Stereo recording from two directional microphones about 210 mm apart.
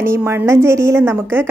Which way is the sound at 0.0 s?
10° right (ahead or behind).